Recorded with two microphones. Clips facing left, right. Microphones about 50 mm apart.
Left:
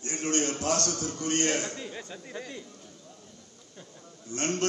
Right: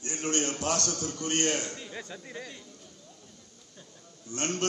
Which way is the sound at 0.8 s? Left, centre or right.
Left.